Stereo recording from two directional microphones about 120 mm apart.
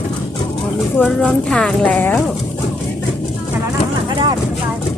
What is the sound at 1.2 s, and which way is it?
Speech, 5° left (ahead or behind).